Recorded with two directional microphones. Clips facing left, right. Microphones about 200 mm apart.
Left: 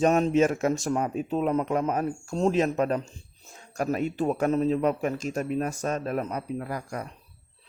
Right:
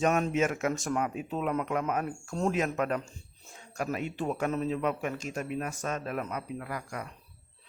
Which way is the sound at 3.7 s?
40° left (ahead or behind).